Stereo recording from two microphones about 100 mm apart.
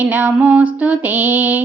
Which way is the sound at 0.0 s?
15° right (ahead or behind).